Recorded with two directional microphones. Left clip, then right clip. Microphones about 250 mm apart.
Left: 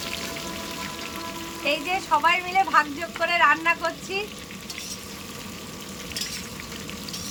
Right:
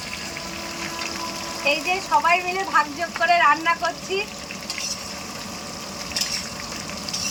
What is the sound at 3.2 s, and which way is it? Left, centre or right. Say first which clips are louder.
Speech: right 2 dB; centre.